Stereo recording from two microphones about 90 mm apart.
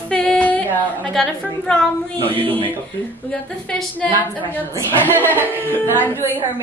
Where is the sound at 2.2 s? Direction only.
20° left (ahead or behind).